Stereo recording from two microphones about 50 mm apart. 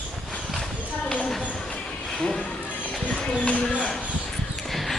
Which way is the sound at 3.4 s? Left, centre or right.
Left.